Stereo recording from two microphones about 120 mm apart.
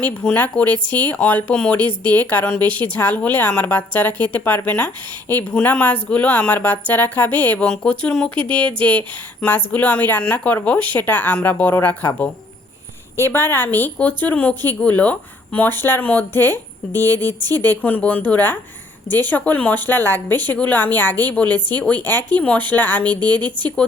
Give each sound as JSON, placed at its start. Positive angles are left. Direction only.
{"t": 0.0, "sound": "a woman's voice", "side_deg": 10}
{"t": 17.5, "sound": "a woman's voice", "side_deg": 15}
{"t": 23.0, "sound": "a woman's voice", "side_deg": -35}